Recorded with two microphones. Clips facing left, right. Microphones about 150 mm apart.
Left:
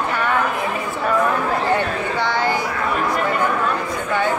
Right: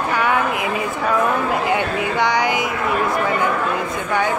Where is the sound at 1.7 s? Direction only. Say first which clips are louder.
Right 1 dB; 15° right (ahead or behind).